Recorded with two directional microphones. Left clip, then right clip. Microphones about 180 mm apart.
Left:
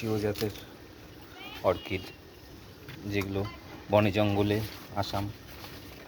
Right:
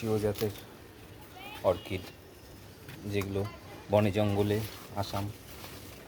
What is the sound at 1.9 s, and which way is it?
Speech, 15° right (ahead or behind).